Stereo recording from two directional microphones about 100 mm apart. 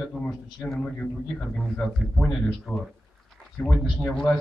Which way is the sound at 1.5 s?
5° left (ahead or behind).